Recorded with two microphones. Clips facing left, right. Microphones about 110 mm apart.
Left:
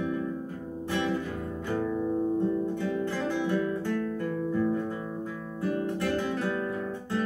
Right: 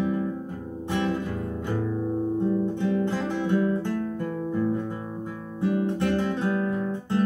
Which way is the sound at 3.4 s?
20° right (ahead or behind).